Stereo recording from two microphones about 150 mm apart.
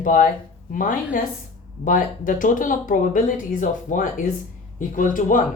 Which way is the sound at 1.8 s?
60° left (ahead or behind).